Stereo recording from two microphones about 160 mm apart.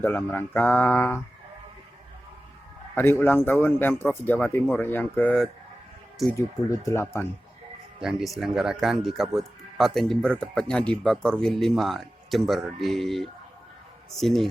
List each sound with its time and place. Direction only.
0.0 s a man's voice: 10° left (ahead or behind)
2.9 s a man's voice: 15° left (ahead or behind)
6.3 s a man's voice: 20° left (ahead or behind)
8.0 s speech: centre (ahead or behind)